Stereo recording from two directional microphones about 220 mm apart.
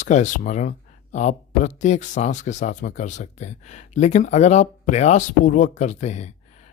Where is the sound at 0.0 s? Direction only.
35° left (ahead or behind).